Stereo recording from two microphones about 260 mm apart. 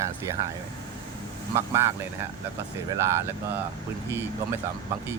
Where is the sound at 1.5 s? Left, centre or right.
Centre.